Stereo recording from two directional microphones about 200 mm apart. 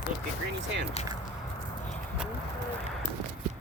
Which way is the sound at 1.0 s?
35° left (ahead or behind).